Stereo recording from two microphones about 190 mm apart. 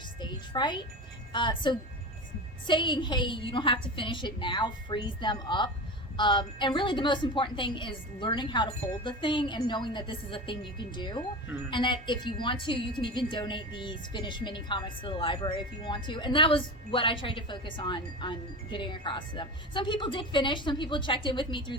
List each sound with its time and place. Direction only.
0.2 s music: 25° left (ahead or behind)
1.3 s a woman's voice: 25° left (ahead or behind)